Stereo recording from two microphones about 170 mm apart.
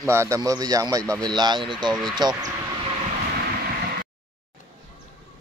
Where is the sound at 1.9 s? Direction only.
5° right (ahead or behind).